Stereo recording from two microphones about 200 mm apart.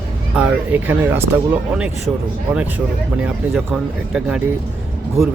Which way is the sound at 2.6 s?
5° right (ahead or behind).